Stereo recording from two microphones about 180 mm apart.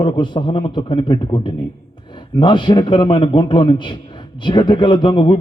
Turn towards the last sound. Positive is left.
turn(degrees=25)  # may be behind; listen again after turning